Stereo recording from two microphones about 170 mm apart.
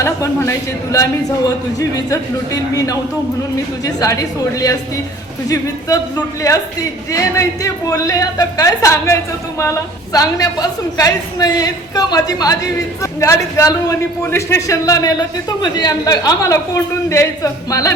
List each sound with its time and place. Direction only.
0.0 s a woman's voice: 15° left (ahead or behind)